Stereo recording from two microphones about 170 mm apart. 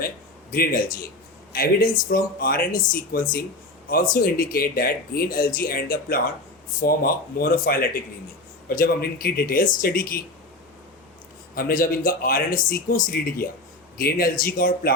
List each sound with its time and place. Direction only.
0.5 s speech: 55° left (ahead or behind)
11.5 s speech: 55° left (ahead or behind)